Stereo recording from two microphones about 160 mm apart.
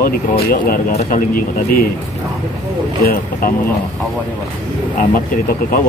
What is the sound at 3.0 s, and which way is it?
Speech, 65° left (ahead or behind).